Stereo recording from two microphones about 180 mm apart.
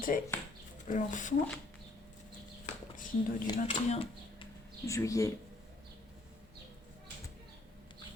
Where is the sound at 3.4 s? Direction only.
30° left (ahead or behind).